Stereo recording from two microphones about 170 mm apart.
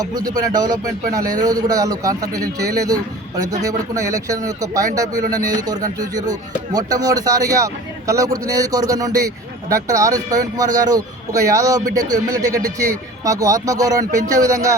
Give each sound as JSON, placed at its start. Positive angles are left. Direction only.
{"t": 0.0, "sound": "a man's voice", "side_deg": -20}